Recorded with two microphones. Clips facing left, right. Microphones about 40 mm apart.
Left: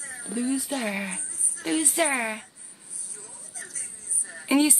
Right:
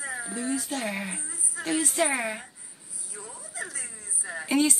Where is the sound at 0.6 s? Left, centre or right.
Centre.